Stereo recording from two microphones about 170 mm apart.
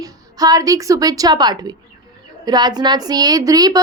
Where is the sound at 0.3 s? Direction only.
20° right (ahead or behind).